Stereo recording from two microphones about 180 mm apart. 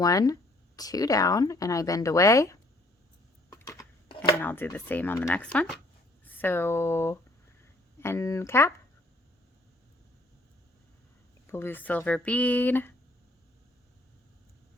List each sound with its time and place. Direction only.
0.0 s speech: 20° left (ahead or behind)
3.5 s a sound: 20° left (ahead or behind)
4.4 s speech: 10° left (ahead or behind)
11.4 s speech: 10° left (ahead or behind)